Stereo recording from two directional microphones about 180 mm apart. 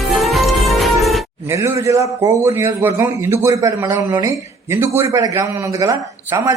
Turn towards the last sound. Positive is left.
turn(degrees=-15)  # may be behind; listen again after turning